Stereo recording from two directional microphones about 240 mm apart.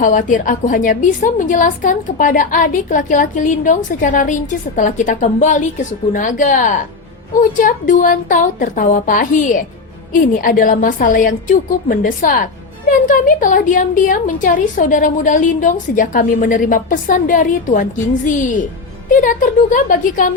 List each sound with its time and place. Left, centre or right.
0.0 s a woman's voice: left